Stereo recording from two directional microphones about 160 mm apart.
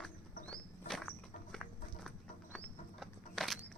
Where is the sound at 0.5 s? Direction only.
5° left (ahead or behind).